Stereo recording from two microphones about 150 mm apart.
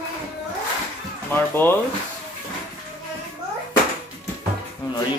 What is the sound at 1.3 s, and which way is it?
Speech, 15° left (ahead or behind).